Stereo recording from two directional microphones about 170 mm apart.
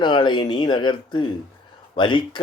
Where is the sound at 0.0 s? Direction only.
25° left (ahead or behind).